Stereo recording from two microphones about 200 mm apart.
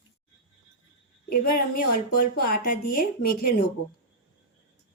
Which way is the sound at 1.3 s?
45° left (ahead or behind).